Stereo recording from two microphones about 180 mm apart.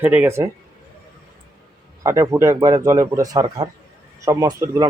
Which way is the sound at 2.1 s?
15° right (ahead or behind).